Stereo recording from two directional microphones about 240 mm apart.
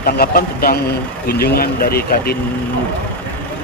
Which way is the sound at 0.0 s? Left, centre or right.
Left.